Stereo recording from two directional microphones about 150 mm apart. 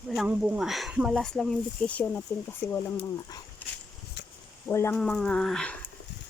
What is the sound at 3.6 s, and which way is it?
Dog, 10° left (ahead or behind).